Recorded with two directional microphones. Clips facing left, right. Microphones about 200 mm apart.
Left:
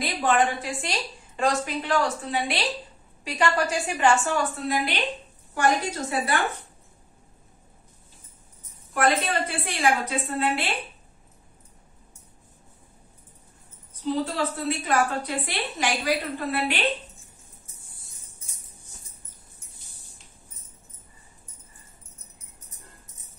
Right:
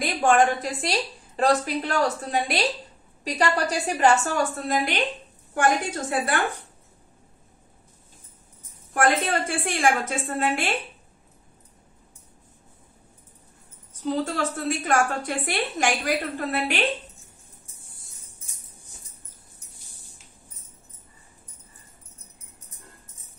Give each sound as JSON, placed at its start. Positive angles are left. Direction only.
{"t": 0.0, "sound": "a woman's voice", "side_deg": -45}
{"t": 8.9, "sound": "a woman's voice", "side_deg": -50}
{"t": 14.0, "sound": "a woman's voice", "side_deg": -45}